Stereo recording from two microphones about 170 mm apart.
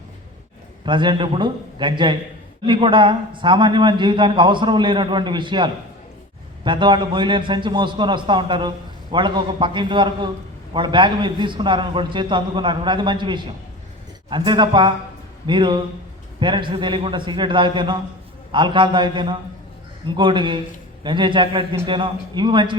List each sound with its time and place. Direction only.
0.9 s speech: 30° right (ahead or behind)